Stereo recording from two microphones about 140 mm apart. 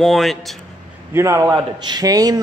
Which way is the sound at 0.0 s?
Centre (ahead or behind).